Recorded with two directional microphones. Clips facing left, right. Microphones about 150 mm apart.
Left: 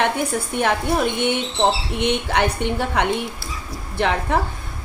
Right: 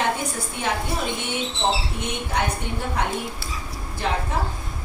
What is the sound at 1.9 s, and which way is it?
A woman's voice, 80° left.